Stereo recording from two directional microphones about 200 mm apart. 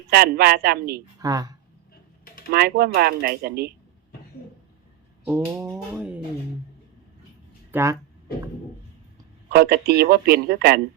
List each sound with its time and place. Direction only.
0.1 s speech: 50° right (ahead or behind)
1.2 s speech: 20° right (ahead or behind)
2.5 s speech: 50° right (ahead or behind)
5.2 s a sound: 10° right (ahead or behind)
5.7 s music: 5° right (ahead or behind)
7.7 s speech: 15° right (ahead or behind)
9.5 s speech: 50° right (ahead or behind)